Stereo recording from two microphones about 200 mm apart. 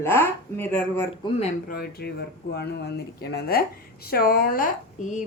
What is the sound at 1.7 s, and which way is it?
A woman's voice, 50° left (ahead or behind).